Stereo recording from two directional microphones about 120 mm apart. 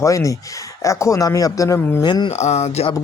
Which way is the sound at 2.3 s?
70° left (ahead or behind).